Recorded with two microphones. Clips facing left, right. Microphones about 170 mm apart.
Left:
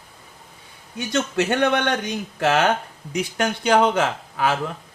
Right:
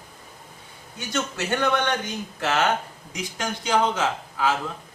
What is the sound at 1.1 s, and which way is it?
Speech, 65° left (ahead or behind).